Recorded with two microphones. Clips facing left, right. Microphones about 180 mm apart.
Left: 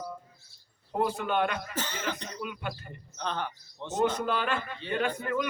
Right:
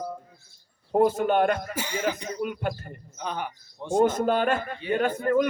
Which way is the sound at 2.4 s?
45° right (ahead or behind).